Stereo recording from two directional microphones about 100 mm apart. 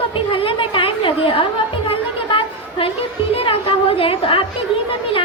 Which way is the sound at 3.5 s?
65° left (ahead or behind).